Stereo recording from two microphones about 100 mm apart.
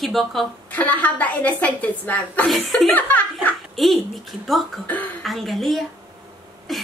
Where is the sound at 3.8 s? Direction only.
Centre (ahead or behind).